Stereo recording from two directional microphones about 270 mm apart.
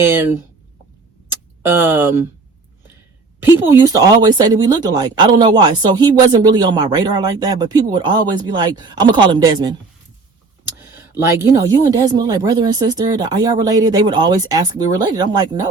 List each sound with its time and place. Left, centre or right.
1.3 s tick: centre
3.7 s speech: centre
10.8 s speech: centre